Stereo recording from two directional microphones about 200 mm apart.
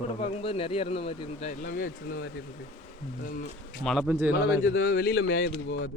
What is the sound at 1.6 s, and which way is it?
Speech, 45° left (ahead or behind).